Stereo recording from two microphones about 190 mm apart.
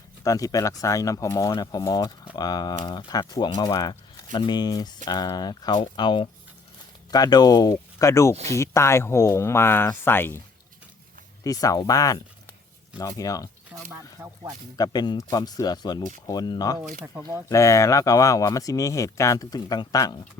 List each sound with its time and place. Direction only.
0.3 s speech: 20° left (ahead or behind)
11.4 s speech: 20° left (ahead or behind)
13.7 s speech: 10° right (ahead or behind)
14.8 s speech: 20° left (ahead or behind)
17.2 s speech: 15° right (ahead or behind)
17.5 s speech: 15° left (ahead or behind)